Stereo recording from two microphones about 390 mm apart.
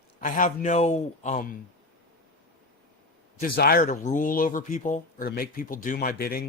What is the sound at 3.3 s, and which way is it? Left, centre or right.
Speech, left.